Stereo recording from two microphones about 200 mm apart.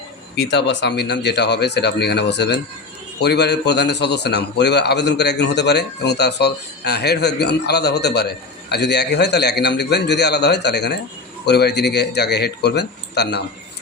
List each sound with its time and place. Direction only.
0.3 s a man's voice: 60° left (ahead or behind)